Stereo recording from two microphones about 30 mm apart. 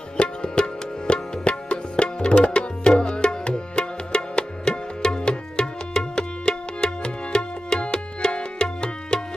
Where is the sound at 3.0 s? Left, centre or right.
Left.